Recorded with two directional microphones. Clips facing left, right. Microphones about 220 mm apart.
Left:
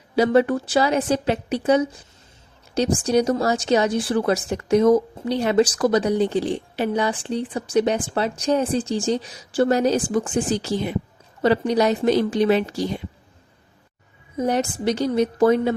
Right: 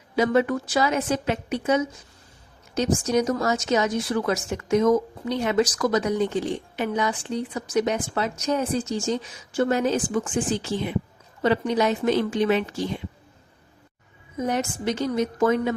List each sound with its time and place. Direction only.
0.2 s speech: 35° left (ahead or behind)
14.3 s speech: 35° left (ahead or behind)